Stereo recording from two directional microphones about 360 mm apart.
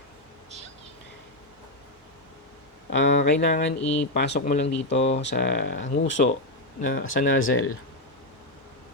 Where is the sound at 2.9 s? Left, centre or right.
Left.